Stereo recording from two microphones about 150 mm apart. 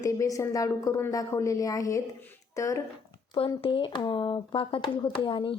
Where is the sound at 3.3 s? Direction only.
35° left (ahead or behind).